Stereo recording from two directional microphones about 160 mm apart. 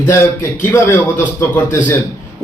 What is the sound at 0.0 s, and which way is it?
A man's voice, 20° left (ahead or behind).